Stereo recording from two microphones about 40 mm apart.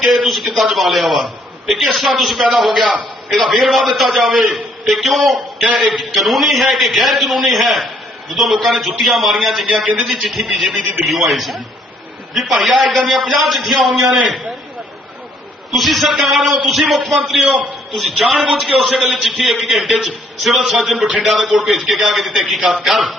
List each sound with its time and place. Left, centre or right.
0.0 s a man's voice: centre
9.6 s a man's voice: right
9.9 s a man's voice: centre
15.7 s a man's voice: centre